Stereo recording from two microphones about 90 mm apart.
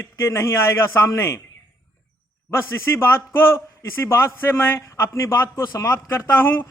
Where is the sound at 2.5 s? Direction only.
30° left (ahead or behind).